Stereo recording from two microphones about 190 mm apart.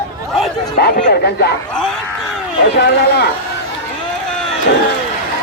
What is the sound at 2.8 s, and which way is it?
Speech, 60° left (ahead or behind).